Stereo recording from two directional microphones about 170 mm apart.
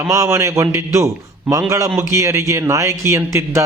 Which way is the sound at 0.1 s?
15° right (ahead or behind).